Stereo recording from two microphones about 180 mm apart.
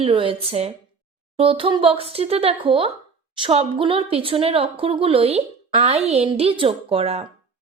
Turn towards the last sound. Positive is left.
turn(degrees=-35)  # may be behind; listen again after turning